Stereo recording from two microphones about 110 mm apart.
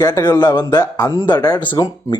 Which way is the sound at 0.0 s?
35° left (ahead or behind).